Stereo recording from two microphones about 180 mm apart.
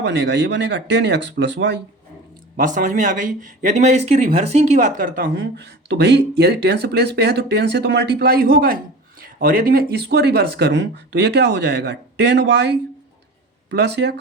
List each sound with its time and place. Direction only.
0.0 s speech: 75° right (ahead or behind)
2.6 s speech: 45° right (ahead or behind); by 14.2 s 70° right (ahead or behind)